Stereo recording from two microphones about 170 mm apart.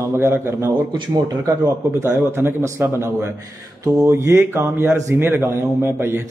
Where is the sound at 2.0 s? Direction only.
15° right (ahead or behind).